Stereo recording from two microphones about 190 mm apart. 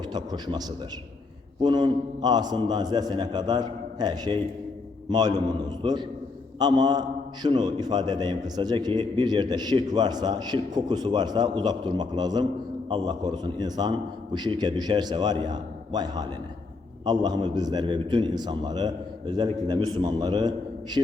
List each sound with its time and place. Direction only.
0.1 s a man's voice: 20° right (ahead or behind)
1.6 s a man's voice: 20° right (ahead or behind)